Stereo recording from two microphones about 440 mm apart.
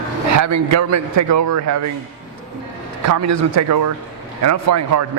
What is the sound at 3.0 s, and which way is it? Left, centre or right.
A man's voice, right.